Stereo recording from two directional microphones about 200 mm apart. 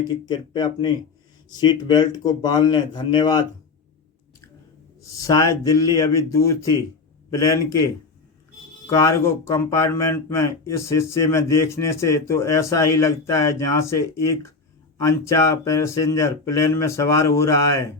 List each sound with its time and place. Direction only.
0.1 s speech: 20° left (ahead or behind)
5.2 s speech: 15° left (ahead or behind)
8.9 s speech: 15° left (ahead or behind)